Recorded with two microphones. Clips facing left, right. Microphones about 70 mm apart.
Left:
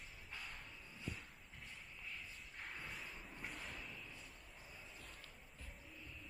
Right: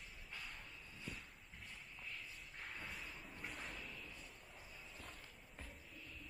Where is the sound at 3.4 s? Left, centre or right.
Centre.